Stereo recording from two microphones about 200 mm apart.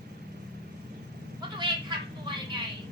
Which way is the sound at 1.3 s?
25° right (ahead or behind).